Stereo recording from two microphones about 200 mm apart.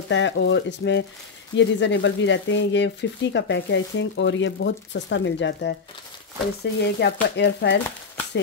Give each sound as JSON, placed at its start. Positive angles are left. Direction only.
{"t": 0.1, "sound": "speech", "side_deg": 65}